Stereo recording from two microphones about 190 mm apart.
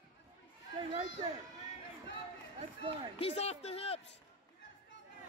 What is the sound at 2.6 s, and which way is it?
Speech, 30° right (ahead or behind).